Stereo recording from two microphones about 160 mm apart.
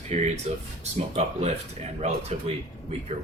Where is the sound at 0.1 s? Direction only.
45° right (ahead or behind).